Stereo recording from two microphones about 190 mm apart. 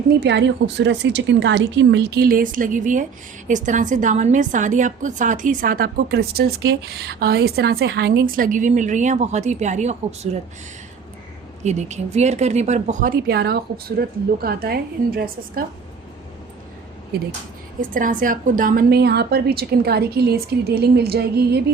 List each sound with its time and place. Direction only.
0.1 s a woman's voice: 65° right (ahead or behind); by 10.2 s 35° right (ahead or behind)
11.6 s a woman's voice: 35° right (ahead or behind); by 15.6 s 50° right (ahead or behind)
17.1 s a woman's voice: 55° right (ahead or behind)
17.7 s a woman's voice: 45° right (ahead or behind)